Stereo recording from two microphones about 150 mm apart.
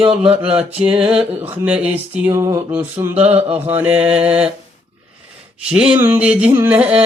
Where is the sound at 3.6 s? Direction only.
10° right (ahead or behind).